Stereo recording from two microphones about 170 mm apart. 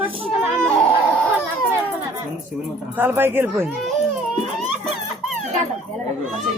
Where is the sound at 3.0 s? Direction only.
10° right (ahead or behind).